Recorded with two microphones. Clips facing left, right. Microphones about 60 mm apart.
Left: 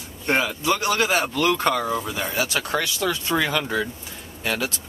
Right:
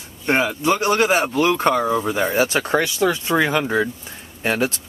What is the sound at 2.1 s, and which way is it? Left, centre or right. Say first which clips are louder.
Speech: right 6 dB; right.